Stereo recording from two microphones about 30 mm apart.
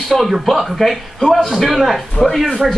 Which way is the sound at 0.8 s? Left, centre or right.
Centre.